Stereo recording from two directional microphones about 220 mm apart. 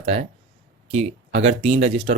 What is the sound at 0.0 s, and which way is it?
Speech, 30° right (ahead or behind).